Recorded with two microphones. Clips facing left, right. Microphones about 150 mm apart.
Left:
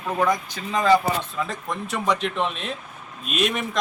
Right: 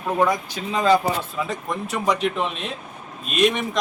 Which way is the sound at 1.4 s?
Centre (ahead or behind).